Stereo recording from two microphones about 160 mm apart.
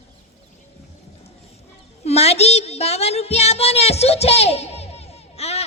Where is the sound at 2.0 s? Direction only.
40° left (ahead or behind).